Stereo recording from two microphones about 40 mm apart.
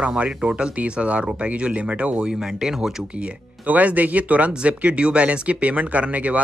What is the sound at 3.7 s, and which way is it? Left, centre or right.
Speech, right.